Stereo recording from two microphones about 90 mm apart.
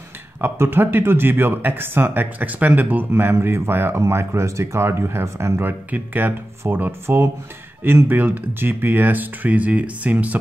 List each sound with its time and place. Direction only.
0.4 s speech: 25° right (ahead or behind)